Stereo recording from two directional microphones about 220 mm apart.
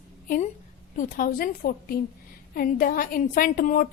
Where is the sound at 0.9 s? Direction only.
35° left (ahead or behind).